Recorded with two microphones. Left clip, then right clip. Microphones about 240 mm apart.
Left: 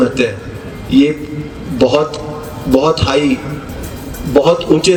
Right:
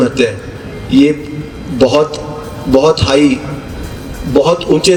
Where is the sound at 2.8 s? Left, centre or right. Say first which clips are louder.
Right 3 dB; right.